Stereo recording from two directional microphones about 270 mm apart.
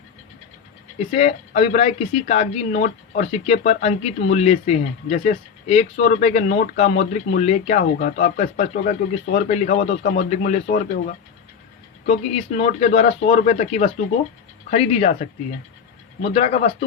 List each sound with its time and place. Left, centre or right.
0.9 s speech: left
16.3 s speech: left